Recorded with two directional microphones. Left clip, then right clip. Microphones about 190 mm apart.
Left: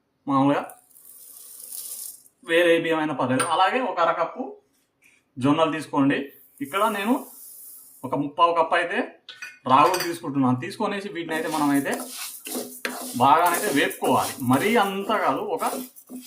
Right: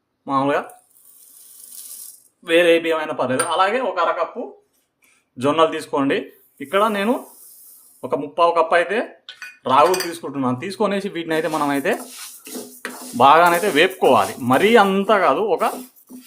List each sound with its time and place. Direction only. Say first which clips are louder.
0.3 s speech: right 2 dB; 35° right (ahead or behind)
2.4 s speech: right 4 dB; 35° right (ahead or behind)
5.4 s speech: right 5 dB; 45° right (ahead or behind)
8.1 s speech: right 3 dB; 45° right (ahead or behind)
13.1 s speech: right 6 dB; 55° right (ahead or behind)